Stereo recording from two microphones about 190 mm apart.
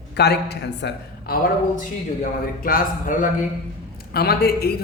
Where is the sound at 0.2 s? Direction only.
60° left (ahead or behind).